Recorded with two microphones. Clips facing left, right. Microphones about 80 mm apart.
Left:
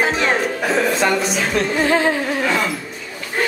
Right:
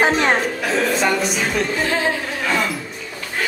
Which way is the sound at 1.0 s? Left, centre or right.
Centre.